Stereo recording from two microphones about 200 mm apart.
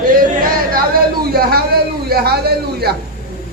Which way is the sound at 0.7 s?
50° right (ahead or behind).